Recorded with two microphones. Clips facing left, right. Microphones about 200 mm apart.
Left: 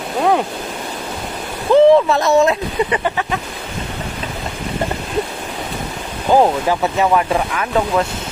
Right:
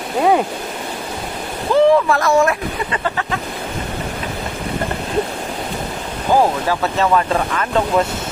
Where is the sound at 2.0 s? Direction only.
20° left (ahead or behind).